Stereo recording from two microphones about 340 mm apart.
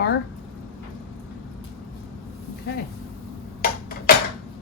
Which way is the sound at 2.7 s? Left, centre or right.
Left.